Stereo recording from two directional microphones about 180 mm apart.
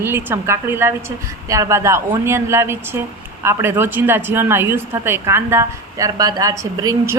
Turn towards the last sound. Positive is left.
turn(degrees=-20)  # may be behind; listen again after turning